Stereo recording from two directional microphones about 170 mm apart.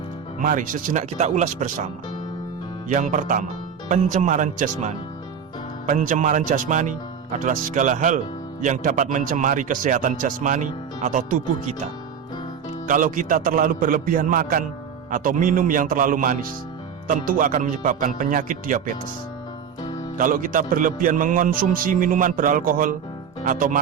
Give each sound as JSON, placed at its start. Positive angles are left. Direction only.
{"t": 0.4, "sound": "speech", "side_deg": -50}
{"t": 2.9, "sound": "speech", "side_deg": -45}
{"t": 12.9, "sound": "speech", "side_deg": -50}
{"t": 19.8, "sound": "music", "side_deg": 25}
{"t": 20.1, "sound": "speech", "side_deg": -55}